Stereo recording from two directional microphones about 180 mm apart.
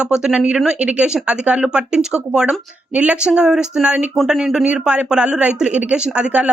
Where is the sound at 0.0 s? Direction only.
5° right (ahead or behind).